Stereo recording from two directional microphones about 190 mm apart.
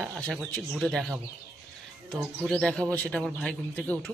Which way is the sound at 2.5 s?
5° left (ahead or behind).